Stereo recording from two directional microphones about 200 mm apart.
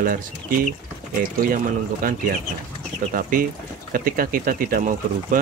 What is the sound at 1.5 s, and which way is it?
Speech, 45° right (ahead or behind).